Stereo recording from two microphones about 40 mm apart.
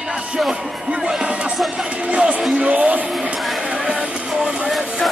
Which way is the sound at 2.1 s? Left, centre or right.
Right.